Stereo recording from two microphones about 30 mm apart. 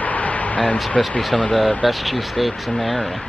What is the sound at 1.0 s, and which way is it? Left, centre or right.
Speech, centre.